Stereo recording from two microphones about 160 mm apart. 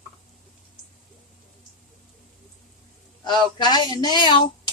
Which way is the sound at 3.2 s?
30° left (ahead or behind).